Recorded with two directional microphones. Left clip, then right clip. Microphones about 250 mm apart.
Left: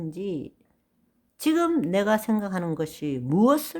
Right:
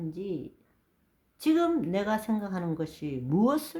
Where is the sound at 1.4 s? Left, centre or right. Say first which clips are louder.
Left 3 dB; left.